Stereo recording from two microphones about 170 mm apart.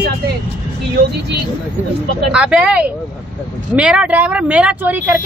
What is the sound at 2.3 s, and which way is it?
Speech, 5° right (ahead or behind).